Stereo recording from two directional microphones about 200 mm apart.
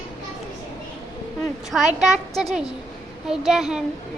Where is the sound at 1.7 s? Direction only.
Centre (ahead or behind).